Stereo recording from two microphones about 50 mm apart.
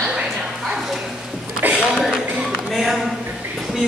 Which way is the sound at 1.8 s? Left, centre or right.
Centre.